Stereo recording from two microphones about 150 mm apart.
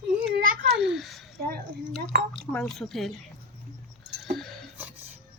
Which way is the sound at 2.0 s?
90° right.